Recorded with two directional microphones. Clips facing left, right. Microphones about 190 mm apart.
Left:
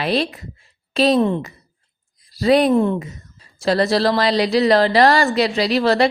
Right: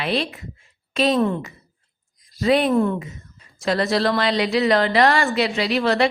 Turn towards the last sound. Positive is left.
turn(degrees=35)  # may be behind; listen again after turning